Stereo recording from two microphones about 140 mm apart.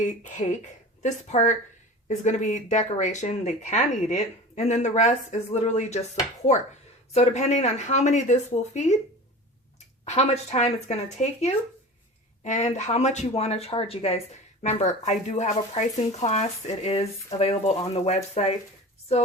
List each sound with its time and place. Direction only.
0.0 s speech: 65° left (ahead or behind)
7.1 s speech: 50° left (ahead or behind)
10.0 s speech: 50° left (ahead or behind)